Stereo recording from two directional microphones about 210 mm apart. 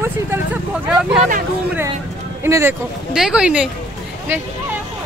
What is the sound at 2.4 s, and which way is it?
Speech, 10° right (ahead or behind).